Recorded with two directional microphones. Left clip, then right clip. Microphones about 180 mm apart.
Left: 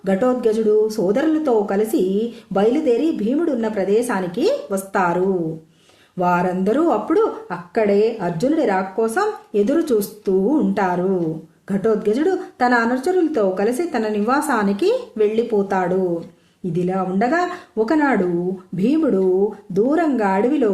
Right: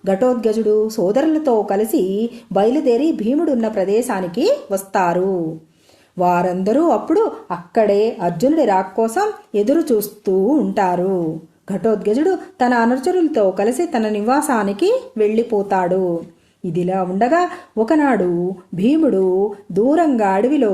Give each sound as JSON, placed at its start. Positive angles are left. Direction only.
{"t": 0.0, "sound": "speech", "side_deg": -35}